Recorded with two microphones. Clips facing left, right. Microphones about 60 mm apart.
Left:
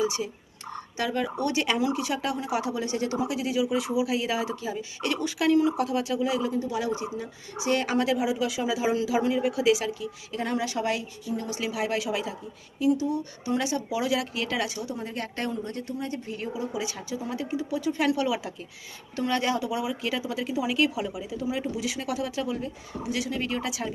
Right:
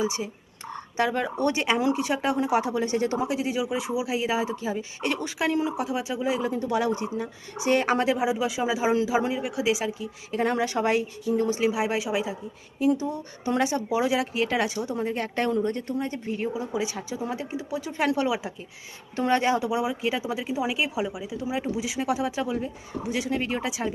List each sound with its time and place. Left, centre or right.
0.0 s speech: right
5.7 s speech: centre
9.3 s speech: centre
10.3 s speech: right
11.8 s speech: centre
12.8 s speech: right; by 17.9 s centre
17.9 s speech: right
21.2 s speech: centre
21.4 s speech: centre